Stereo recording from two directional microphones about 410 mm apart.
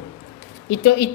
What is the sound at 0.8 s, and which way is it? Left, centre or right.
Speech, left.